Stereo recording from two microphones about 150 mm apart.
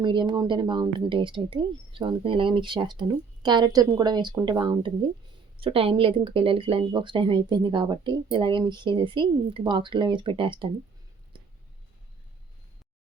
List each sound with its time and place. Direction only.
0.0 s speech: 30° right (ahead or behind)